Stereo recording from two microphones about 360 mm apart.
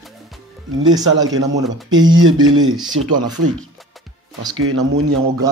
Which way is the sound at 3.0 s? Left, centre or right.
Right.